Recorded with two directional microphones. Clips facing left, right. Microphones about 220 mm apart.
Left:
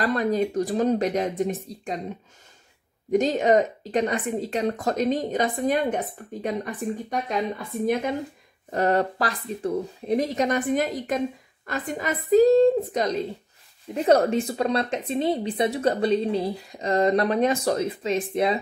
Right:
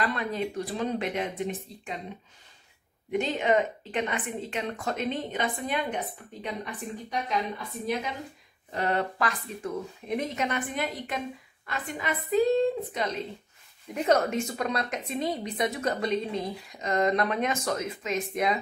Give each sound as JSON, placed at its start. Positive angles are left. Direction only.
{"t": 0.0, "sound": "speech", "side_deg": 40}
{"t": 3.1, "sound": "a woman's voice", "side_deg": 40}